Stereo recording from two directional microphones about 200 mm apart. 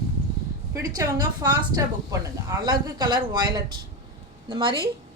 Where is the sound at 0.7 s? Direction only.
20° right (ahead or behind).